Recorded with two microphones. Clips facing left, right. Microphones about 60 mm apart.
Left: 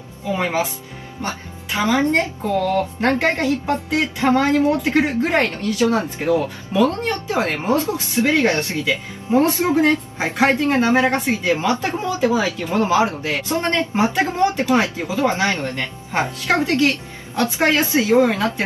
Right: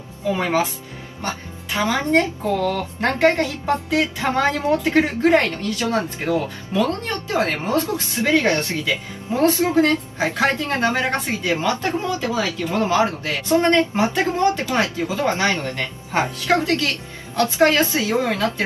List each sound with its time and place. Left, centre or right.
0.3 s speech: centre
2.4 s speech: centre
3.4 s a woman's voice: left
15.7 s speech: centre
16.4 s a woman's voice: left